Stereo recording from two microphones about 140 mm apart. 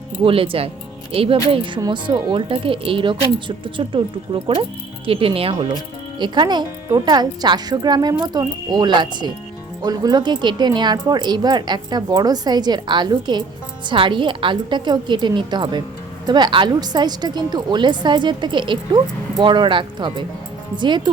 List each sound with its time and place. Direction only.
0.3 s speech: 40° right (ahead or behind)